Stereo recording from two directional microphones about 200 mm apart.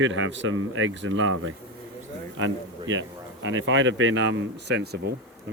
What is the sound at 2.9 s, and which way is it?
Speech, 70° right (ahead or behind).